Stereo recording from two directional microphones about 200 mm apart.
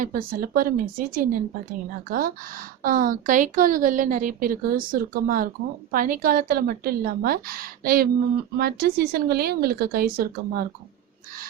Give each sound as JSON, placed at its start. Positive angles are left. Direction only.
{"t": 0.0, "sound": "a woman's voice", "side_deg": -45}